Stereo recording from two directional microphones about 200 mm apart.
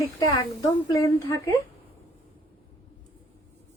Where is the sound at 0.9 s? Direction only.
15° left (ahead or behind).